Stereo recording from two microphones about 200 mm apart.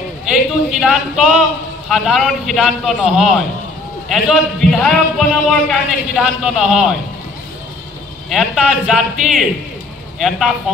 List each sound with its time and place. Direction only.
0.3 s a man's voice: 5° right (ahead or behind)
8.3 s a man's voice: centre (ahead or behind)